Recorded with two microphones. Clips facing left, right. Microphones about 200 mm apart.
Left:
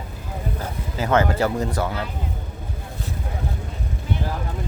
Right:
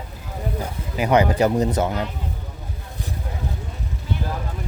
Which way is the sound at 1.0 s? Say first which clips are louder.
Right 2 dB; 15° right (ahead or behind).